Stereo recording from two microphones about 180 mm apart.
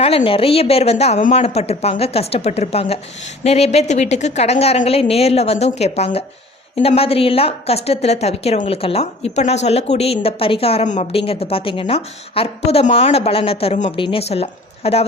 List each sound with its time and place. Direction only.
0.0 s a woman's voice: 35° left (ahead or behind)